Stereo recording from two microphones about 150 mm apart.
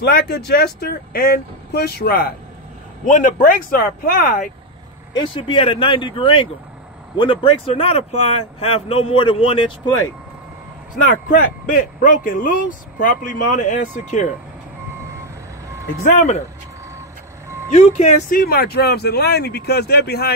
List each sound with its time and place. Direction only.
0.0 s speech: 90° left
3.1 s speech: 60° left (ahead or behind)
5.1 s speech: 35° left (ahead or behind)
11.1 s speech: 65° left (ahead or behind)
16.0 s speech: 50° left (ahead or behind)
18.3 s speech: 85° left